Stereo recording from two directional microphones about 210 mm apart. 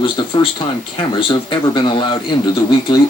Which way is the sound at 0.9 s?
20° left (ahead or behind).